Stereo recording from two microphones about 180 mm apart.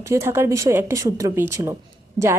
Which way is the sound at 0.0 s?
15° right (ahead or behind).